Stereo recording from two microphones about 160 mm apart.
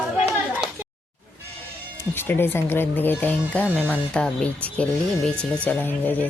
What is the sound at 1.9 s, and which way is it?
Speech, 15° left (ahead or behind).